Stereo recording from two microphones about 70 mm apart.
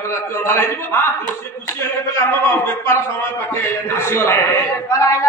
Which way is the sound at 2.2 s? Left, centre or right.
Left.